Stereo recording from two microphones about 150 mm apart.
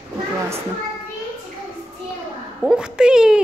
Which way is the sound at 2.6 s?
5° right (ahead or behind).